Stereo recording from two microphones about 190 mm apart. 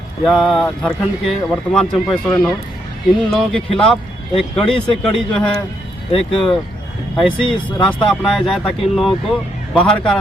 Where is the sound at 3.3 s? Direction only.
Centre (ahead or behind).